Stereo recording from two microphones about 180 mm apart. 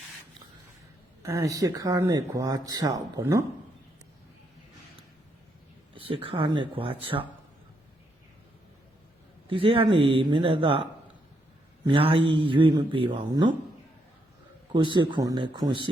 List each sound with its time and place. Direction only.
1.2 s speech: 15° right (ahead or behind)
5.9 s speech: 30° right (ahead or behind)
9.5 s speech: 30° right (ahead or behind)
11.9 s mantra: 30° right (ahead or behind)
12.3 s speech: 25° right (ahead or behind)
14.7 s speech: 25° right (ahead or behind)